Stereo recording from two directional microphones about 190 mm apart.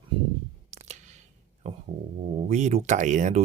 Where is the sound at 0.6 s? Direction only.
35° right (ahead or behind).